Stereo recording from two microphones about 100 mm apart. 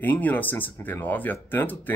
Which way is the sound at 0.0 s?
15° left (ahead or behind).